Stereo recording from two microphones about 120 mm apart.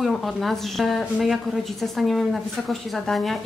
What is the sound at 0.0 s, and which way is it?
A woman's voice, centre (ahead or behind).